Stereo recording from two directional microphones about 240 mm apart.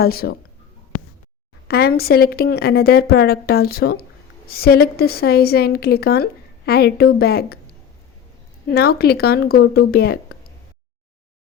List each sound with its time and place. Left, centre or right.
0.0 s speech: left
1.6 s speech: left
8.7 s speech: left